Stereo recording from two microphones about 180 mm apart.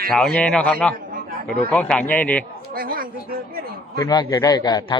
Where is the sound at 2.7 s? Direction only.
55° right (ahead or behind).